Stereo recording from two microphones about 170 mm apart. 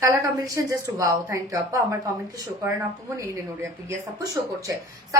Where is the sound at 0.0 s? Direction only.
20° right (ahead or behind).